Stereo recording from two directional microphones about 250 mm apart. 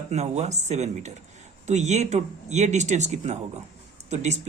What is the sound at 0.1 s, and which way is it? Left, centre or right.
Speech, right.